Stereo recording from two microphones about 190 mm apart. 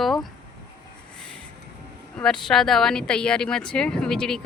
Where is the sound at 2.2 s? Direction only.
5° left (ahead or behind).